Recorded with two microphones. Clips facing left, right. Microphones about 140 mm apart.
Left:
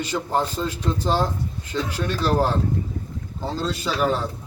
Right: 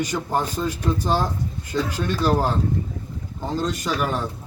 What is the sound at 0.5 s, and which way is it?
Speech, 10° right (ahead or behind).